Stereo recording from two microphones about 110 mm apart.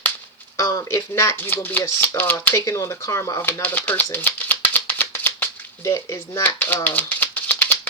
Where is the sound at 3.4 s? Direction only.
20° left (ahead or behind).